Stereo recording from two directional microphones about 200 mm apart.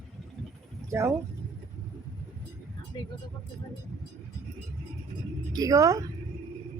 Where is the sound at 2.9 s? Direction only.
20° left (ahead or behind).